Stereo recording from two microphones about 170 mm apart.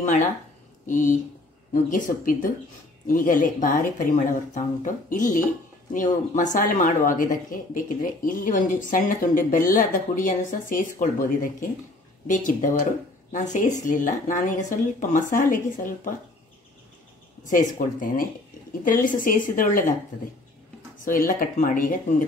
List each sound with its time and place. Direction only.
0.8 s speech: 50° left (ahead or behind)
17.4 s speech: 50° left (ahead or behind)
21.0 s speech: 55° left (ahead or behind)